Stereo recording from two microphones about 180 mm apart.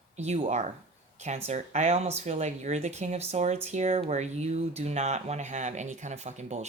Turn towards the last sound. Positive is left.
turn(degrees=-40)  # may be behind; listen again after turning